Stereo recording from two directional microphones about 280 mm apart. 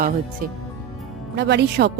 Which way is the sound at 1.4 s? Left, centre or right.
Right.